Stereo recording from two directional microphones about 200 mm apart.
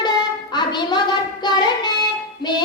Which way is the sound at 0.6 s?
20° left (ahead or behind).